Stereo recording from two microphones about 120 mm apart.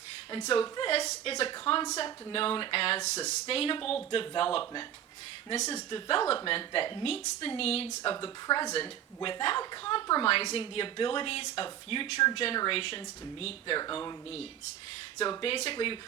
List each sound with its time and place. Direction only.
0.6 s a woman's voice: 50° left (ahead or behind)
5.5 s speech: 70° left (ahead or behind)
5.9 s a woman's voice: 50° left (ahead or behind)
8.2 s speech: 35° left (ahead or behind)
8.7 s a woman's voice: 45° left (ahead or behind)
15.2 s a woman's voice: 45° left (ahead or behind)